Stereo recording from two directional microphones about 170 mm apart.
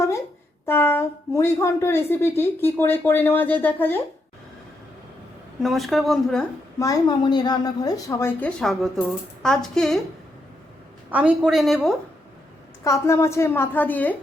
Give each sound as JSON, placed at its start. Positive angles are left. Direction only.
{"t": 0.6, "sound": "a woman's voice", "side_deg": 15}
{"t": 5.6, "sound": "a woman's voice", "side_deg": 0}
{"t": 6.7, "sound": "a woman's voice", "side_deg": 20}
{"t": 11.1, "sound": "a woman's voice", "side_deg": -10}
{"t": 12.8, "sound": "a woman's voice", "side_deg": 15}